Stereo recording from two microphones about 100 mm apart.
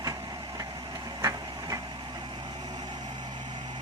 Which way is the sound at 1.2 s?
35° right (ahead or behind).